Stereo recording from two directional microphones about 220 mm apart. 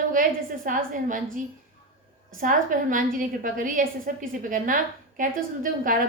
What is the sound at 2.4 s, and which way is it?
A woman's voice, 40° right (ahead or behind).